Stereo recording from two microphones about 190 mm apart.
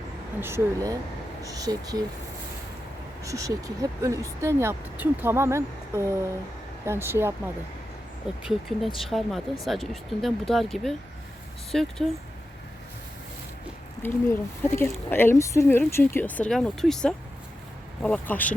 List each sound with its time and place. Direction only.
0.3 s speech: 15° right (ahead or behind)
3.2 s speech: 15° right (ahead or behind)
9.0 s speech: centre (ahead or behind)
14.0 s speech: 10° left (ahead or behind)